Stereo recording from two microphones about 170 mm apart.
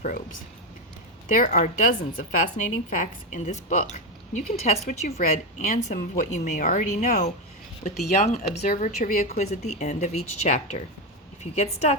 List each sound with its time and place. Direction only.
0.0 s a woman's voice: 50° left (ahead or behind)